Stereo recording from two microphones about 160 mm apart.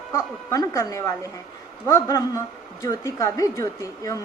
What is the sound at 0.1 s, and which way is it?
Speech, 20° left (ahead or behind).